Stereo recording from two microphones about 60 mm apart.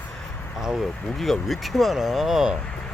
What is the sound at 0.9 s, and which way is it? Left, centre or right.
Speech, centre.